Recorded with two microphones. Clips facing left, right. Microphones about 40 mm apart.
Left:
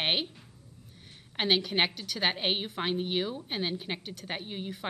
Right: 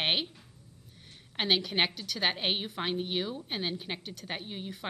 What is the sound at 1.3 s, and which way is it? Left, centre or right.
A woman's voice, centre.